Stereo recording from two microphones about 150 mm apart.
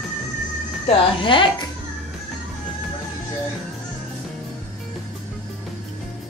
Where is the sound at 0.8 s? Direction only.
35° left (ahead or behind).